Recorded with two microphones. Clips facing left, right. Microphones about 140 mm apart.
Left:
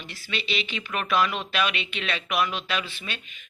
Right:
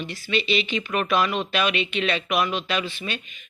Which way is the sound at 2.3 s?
40° right (ahead or behind).